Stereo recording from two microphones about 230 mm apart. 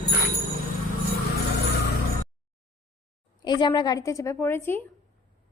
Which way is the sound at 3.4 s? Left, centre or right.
Centre.